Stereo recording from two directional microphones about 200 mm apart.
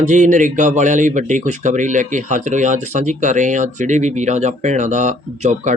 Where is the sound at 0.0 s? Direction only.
40° right (ahead or behind).